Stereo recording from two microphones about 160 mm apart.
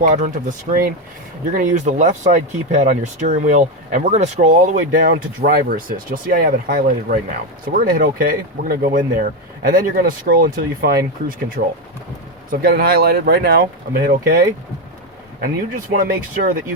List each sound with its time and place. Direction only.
0.0 s speech: 50° right (ahead or behind); by 13.6 s 85° right
14.0 s speech: 75° right (ahead or behind)
15.7 s speech: 60° right (ahead or behind)